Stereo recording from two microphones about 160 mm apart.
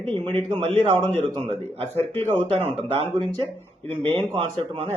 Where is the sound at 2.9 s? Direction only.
30° right (ahead or behind).